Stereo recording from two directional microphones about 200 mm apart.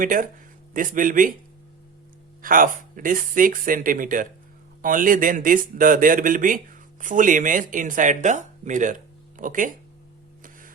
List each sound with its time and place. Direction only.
0.0 s speech: 45° right (ahead or behind)
2.4 s speech: 45° right (ahead or behind)